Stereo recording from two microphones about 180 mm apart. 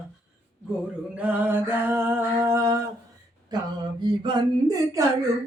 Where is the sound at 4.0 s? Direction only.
25° right (ahead or behind).